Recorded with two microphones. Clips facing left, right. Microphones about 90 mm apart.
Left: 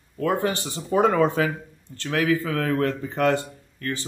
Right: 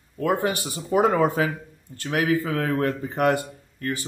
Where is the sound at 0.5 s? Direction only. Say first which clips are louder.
Even; 30° left (ahead or behind).